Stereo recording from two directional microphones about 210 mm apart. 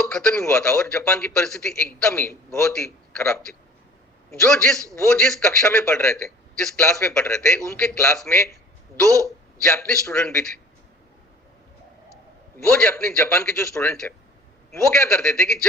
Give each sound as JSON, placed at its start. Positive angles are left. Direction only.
{"t": 0.1, "sound": "a man's voice", "side_deg": 5}
{"t": 9.0, "sound": "a man's voice", "side_deg": -15}
{"t": 9.6, "sound": "a man's voice", "side_deg": 5}
{"t": 12.5, "sound": "a man's voice", "side_deg": 10}